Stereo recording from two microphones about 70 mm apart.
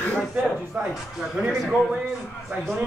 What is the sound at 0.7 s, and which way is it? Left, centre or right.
Speech, centre.